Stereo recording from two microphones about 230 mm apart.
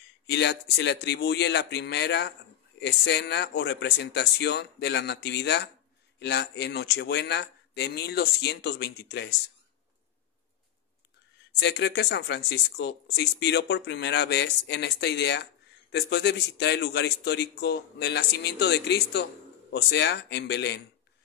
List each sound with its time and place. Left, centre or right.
0.3 s speech: left
11.6 s speech: left